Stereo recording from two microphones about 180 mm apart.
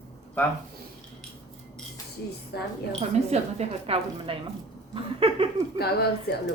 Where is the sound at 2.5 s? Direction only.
65° left (ahead or behind).